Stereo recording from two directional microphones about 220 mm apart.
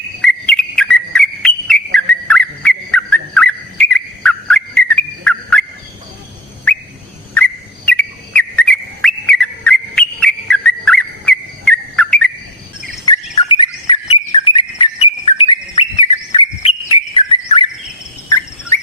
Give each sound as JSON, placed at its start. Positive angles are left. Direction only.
{"t": 0.2, "sound": "whistle", "side_deg": 5}
{"t": 7.3, "sound": "whistle", "side_deg": 5}
{"t": 13.1, "sound": "bird", "side_deg": 20}
{"t": 18.3, "sound": "bird", "side_deg": 10}